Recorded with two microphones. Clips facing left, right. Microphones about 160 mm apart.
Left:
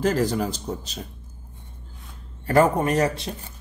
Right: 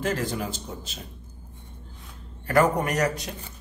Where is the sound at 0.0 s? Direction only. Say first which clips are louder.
Left 6 dB; 35° left (ahead or behind).